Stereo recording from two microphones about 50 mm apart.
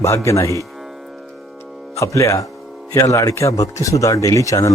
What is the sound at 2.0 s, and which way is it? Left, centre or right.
Speech, left.